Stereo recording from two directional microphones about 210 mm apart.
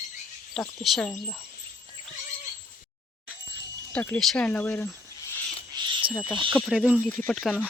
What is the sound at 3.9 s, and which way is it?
Speech, 5° left (ahead or behind).